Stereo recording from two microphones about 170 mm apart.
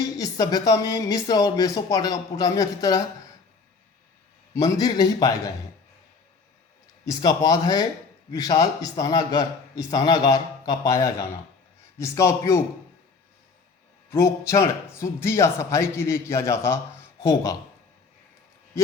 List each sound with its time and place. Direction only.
0.0 s speech: 20° left (ahead or behind)
4.5 s speech: 20° left (ahead or behind)
7.0 s a man's voice: 20° left (ahead or behind)
14.1 s a man's voice: 15° left (ahead or behind)